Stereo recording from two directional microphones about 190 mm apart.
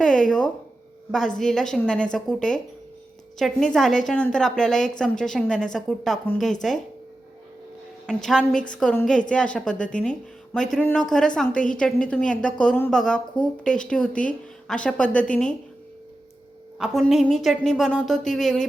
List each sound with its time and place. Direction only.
0.0 s a woman's voice: 5° left (ahead or behind)
8.0 s a woman's voice: 5° left (ahead or behind)
16.7 s a woman's voice: centre (ahead or behind)